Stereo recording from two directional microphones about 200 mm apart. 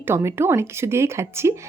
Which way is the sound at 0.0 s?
15° right (ahead or behind).